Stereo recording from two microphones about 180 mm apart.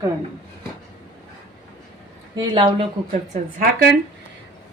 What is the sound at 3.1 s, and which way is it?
Speech, 50° right (ahead or behind).